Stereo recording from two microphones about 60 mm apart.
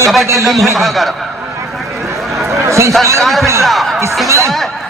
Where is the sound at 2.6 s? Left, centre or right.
Right.